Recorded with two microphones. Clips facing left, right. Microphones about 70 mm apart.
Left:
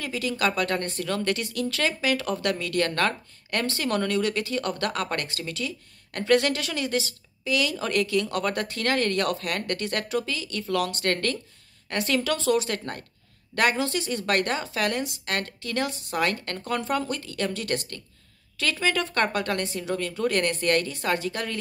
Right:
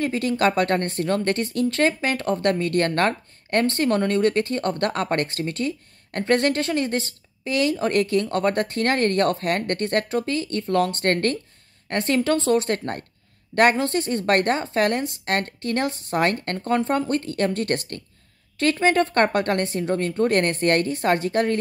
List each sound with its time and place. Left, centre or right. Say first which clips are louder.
0.0 s speech: right 6 dB; right
16.6 s speech: right 5 dB; right
17.1 s speech: right 7 dB; right